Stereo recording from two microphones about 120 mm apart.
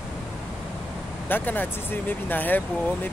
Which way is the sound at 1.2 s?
15° left (ahead or behind).